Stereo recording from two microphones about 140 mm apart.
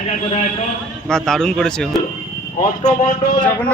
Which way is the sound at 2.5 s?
60° left (ahead or behind).